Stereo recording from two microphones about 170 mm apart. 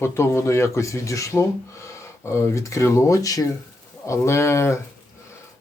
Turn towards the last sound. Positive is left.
turn(degrees=15)  # may be behind; listen again after turning